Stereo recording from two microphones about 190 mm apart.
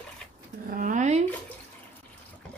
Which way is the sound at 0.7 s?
45° right (ahead or behind).